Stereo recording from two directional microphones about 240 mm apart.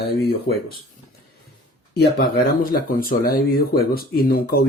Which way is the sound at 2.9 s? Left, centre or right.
Left.